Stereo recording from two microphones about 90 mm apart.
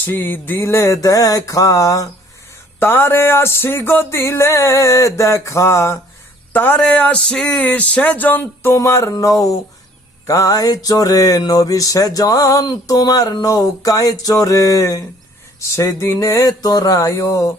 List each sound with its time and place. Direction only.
0.0 s music: 20° left (ahead or behind); by 2.0 s 40° left (ahead or behind)
2.7 s music: 25° left (ahead or behind)
6.5 s a sound: 20° left (ahead or behind)
8.7 s music: 35° left (ahead or behind)